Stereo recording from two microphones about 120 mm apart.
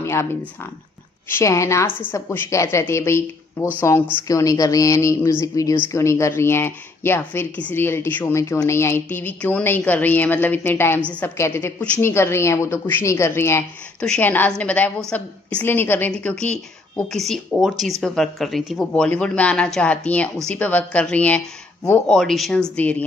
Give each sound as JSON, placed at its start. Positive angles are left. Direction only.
{"t": 0.0, "sound": "speech", "side_deg": 20}
{"t": 1.3, "sound": "a woman's voice", "side_deg": 25}
{"t": 13.9, "sound": "a woman's voice", "side_deg": 10}